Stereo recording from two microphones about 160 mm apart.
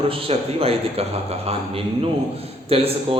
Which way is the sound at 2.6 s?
35° right (ahead or behind).